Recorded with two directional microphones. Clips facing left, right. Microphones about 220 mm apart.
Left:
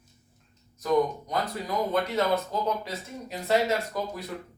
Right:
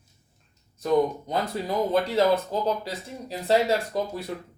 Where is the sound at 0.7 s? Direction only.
30° right (ahead or behind).